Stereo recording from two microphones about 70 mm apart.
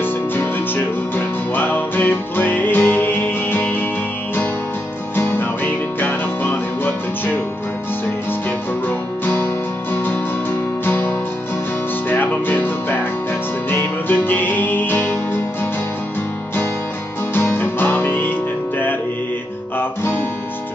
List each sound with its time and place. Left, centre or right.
0.0 s music: left
5.1 s music: left
10.9 s music: left
17.3 s music: left
19.8 s guitar: left